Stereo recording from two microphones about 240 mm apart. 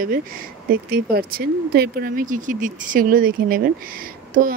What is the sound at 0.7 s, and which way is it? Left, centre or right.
Speech, right.